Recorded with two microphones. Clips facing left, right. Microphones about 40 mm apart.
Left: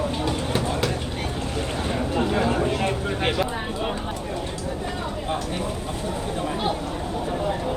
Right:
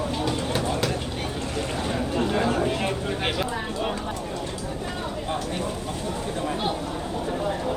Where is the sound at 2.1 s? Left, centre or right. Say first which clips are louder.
Left 1 dB; centre.